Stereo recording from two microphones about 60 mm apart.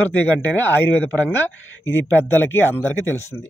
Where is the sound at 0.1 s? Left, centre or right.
Left.